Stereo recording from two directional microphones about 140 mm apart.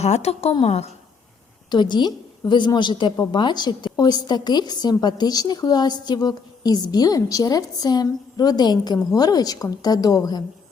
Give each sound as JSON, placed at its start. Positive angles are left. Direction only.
{"t": 0.0, "sound": "a woman's voice", "side_deg": 50}
{"t": 1.7, "sound": "a woman's voice", "side_deg": 30}